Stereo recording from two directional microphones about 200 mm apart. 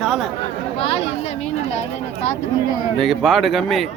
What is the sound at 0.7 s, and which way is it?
Speech, 30° left (ahead or behind).